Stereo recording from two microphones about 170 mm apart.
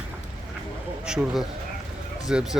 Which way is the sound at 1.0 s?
5° right (ahead or behind).